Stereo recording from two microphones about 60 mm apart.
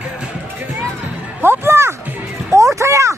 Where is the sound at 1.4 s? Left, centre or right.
Right.